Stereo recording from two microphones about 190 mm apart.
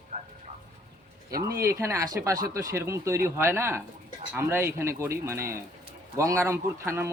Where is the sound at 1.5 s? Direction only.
15° right (ahead or behind).